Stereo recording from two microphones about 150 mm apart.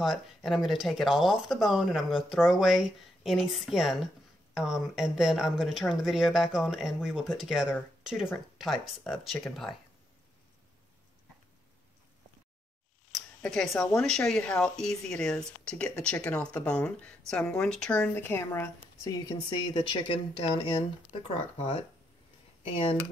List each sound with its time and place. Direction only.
0.0 s speech: centre (ahead or behind)
13.4 s a woman's voice: 5° left (ahead or behind); by 22.9 s 40° left (ahead or behind)